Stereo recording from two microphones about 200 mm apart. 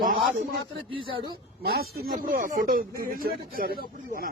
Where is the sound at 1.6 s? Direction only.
50° right (ahead or behind).